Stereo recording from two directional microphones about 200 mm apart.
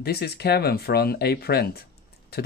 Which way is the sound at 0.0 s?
50° left (ahead or behind).